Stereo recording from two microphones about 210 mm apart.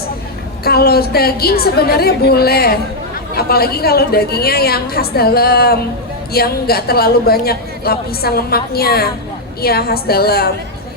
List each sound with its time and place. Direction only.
0.6 s a woman's voice: 45° left (ahead or behind)